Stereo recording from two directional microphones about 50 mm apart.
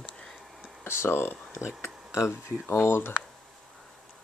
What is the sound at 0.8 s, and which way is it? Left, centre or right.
Speech, left.